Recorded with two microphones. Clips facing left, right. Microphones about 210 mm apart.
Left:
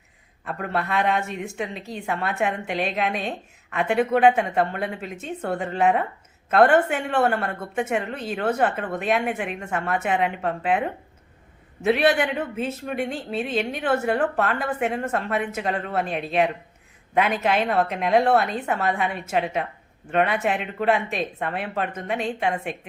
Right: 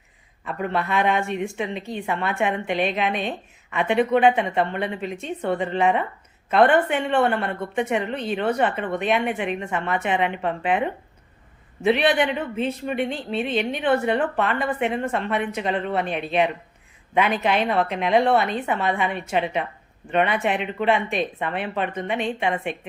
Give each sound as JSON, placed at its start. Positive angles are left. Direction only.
{"t": 0.4, "sound": "speech", "side_deg": 0}
{"t": 11.9, "sound": "speech", "side_deg": 0}